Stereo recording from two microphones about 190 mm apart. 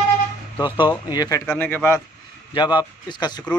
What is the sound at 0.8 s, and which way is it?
Speech, 20° left (ahead or behind).